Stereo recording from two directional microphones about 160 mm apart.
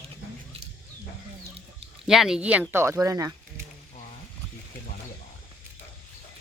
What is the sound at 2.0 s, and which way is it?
Speech, centre (ahead or behind).